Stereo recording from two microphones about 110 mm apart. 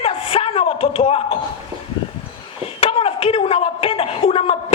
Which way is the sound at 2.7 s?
60° left (ahead or behind).